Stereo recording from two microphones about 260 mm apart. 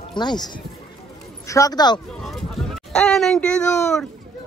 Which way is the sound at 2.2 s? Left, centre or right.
Centre.